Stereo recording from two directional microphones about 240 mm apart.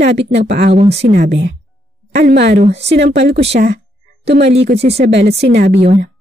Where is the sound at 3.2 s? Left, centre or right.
Right.